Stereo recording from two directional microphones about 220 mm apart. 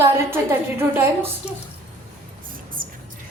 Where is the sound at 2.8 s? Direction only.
40° right (ahead or behind).